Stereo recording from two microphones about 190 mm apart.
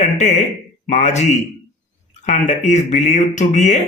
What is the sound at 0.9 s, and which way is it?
Speech, 35° left (ahead or behind).